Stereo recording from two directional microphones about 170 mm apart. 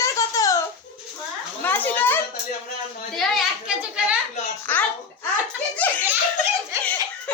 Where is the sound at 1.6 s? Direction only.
10° left (ahead or behind).